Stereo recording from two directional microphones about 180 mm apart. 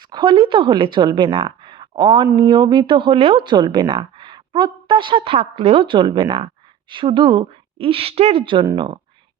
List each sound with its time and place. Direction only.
0.0 s speech: 25° right (ahead or behind)